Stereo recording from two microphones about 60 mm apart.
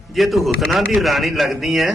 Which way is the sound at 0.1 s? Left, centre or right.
Centre.